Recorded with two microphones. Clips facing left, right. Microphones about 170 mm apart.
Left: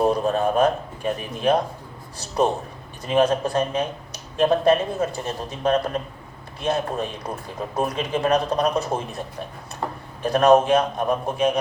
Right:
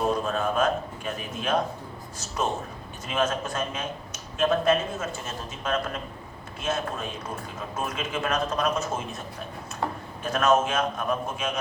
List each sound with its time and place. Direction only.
0.1 s speech: 35° left (ahead or behind)
10.2 s speech: 35° left (ahead or behind)